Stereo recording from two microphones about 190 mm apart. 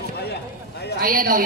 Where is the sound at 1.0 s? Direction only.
45° right (ahead or behind).